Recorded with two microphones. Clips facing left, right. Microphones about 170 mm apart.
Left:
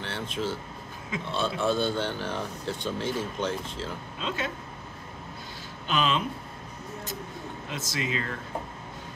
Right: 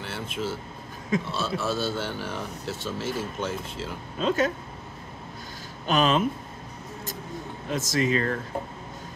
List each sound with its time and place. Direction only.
0.0 s speech: 10° right (ahead or behind)
4.2 s speech: 45° right (ahead or behind)
5.9 s speech: 45° right (ahead or behind)
7.7 s speech: 45° right (ahead or behind)